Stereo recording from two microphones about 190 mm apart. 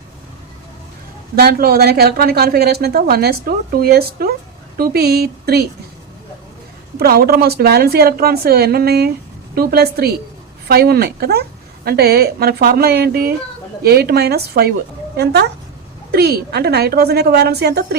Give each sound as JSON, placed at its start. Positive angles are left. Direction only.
{"t": 1.4, "sound": "speech", "side_deg": -55}
{"t": 6.9, "sound": "speech", "side_deg": -55}